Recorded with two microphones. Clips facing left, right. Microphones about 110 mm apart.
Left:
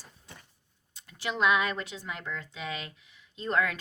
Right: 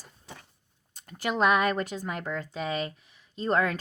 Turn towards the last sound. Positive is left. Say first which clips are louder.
# right 3 dB
turn(degrees=-40)  # may be behind; listen again after turning